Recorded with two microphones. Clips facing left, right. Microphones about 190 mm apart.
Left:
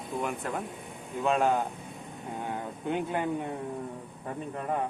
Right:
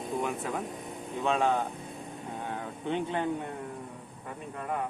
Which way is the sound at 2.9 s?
5° left (ahead or behind).